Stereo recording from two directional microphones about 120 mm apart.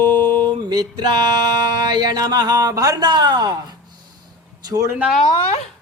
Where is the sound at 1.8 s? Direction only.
35° right (ahead or behind).